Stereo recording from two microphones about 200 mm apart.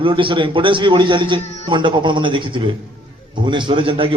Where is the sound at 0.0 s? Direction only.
25° right (ahead or behind).